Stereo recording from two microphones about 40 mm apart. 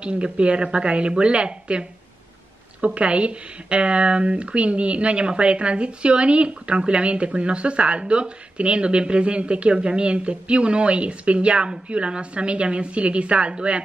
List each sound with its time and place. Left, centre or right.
0.0 s speech: right